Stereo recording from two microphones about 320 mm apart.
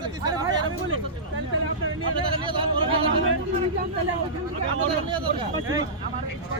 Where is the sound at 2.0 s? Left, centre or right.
Centre.